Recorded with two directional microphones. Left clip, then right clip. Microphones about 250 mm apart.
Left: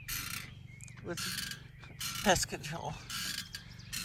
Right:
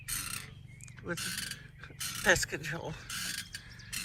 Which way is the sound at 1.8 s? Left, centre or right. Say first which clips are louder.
Right 2 dB; centre.